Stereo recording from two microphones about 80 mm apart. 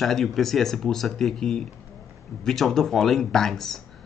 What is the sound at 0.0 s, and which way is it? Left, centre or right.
Speech, centre.